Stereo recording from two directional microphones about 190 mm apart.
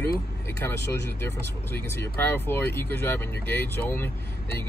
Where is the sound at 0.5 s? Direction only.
15° left (ahead or behind).